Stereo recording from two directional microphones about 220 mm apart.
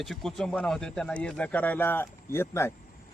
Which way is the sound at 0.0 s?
Centre (ahead or behind).